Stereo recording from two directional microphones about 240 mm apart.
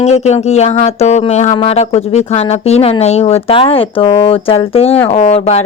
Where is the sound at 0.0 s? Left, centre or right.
Left.